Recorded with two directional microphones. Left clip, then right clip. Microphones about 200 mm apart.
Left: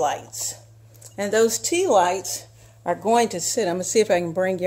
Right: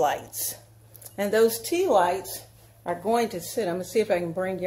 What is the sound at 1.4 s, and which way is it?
A woman's voice, 40° left (ahead or behind).